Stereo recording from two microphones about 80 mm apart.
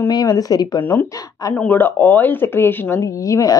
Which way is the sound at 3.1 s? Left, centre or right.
Left.